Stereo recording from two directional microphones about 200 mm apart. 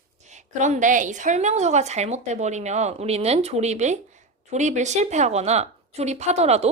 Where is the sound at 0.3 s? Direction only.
35° right (ahead or behind).